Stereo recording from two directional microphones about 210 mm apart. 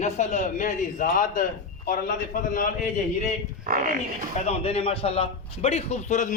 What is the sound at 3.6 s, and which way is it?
Speech, 45° right (ahead or behind).